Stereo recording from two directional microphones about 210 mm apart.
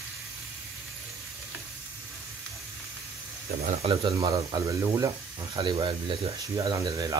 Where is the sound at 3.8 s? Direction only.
20° right (ahead or behind).